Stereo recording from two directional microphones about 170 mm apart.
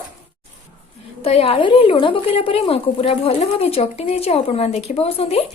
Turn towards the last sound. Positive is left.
turn(degrees=35)  # may be behind; listen again after turning